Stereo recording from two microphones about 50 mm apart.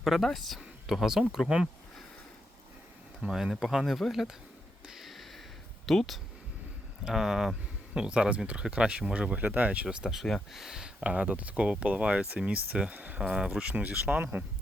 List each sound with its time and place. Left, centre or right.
0.0 s speech: centre
3.2 s speech: centre
4.9 s a sound: centre
5.8 s speech: centre
7.0 s speech: centre; by 9.8 s right
9.8 s speech: centre; by 14.4 s right